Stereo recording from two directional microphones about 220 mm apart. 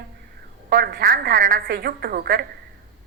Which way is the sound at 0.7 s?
45° right (ahead or behind).